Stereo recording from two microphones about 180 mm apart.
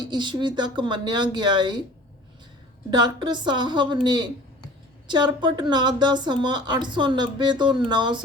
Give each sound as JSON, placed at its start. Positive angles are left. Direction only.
{"t": 0.0, "sound": "a woman's voice", "side_deg": -25}
{"t": 2.9, "sound": "a woman's voice", "side_deg": -25}